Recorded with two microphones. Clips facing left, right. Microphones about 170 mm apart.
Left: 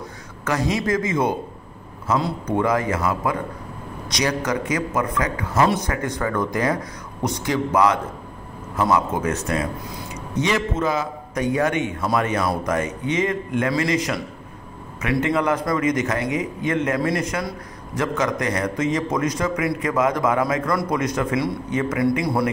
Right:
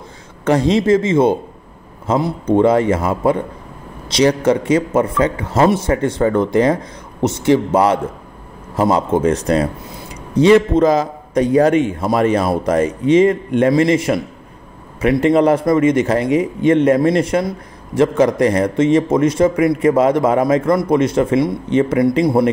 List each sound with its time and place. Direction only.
0.5 s a man's voice: 30° right (ahead or behind)